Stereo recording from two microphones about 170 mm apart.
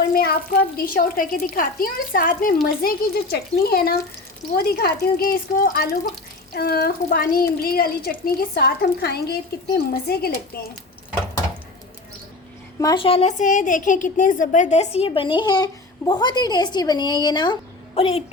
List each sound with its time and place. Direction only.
0.1 s speech: 65° left (ahead or behind)
2.6 s speech: 65° left (ahead or behind)
12.8 s a woman's voice: 30° left (ahead or behind)